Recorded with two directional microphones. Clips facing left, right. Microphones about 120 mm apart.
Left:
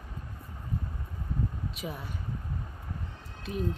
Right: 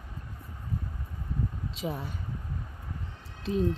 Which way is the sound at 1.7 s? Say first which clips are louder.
Right 8 dB; 30° right (ahead or behind).